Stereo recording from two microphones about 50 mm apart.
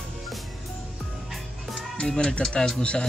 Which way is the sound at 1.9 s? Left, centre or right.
Centre.